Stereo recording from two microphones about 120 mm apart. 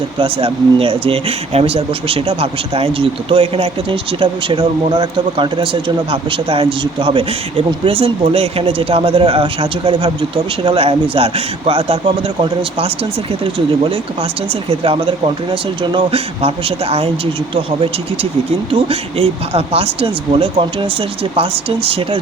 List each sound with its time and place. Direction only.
0.2 s speech: 50° right (ahead or behind)
18.7 s speech: 50° right (ahead or behind)